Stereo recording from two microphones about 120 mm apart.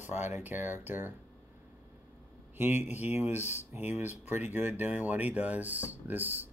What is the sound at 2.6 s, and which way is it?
Speech, 15° right (ahead or behind).